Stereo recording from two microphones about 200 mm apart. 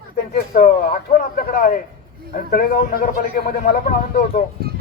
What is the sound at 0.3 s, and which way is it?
A man's voice, 50° left (ahead or behind).